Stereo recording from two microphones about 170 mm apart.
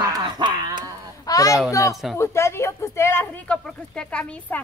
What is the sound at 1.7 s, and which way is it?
A woman's voice, 20° left (ahead or behind).